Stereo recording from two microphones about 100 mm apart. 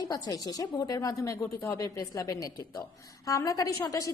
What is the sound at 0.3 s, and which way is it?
A woman's voice, 40° left (ahead or behind).